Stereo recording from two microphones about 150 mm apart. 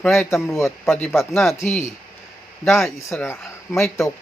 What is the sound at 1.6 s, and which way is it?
Speech, centre (ahead or behind).